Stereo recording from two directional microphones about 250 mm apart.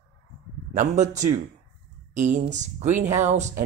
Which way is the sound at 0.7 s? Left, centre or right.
Right.